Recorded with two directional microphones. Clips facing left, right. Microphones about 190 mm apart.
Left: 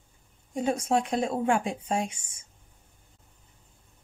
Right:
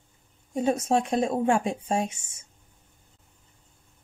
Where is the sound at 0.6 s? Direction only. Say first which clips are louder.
Right 2 dB; 25° right (ahead or behind).